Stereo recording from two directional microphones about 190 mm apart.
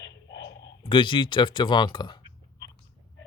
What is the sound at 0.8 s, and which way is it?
Speech, 25° left (ahead or behind).